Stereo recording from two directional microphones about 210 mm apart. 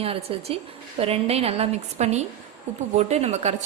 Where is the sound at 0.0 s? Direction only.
25° right (ahead or behind).